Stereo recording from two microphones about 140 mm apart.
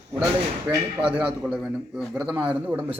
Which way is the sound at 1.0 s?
10° right (ahead or behind).